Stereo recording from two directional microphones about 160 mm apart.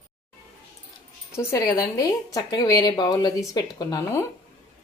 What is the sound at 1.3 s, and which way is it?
A woman's voice, 20° left (ahead or behind).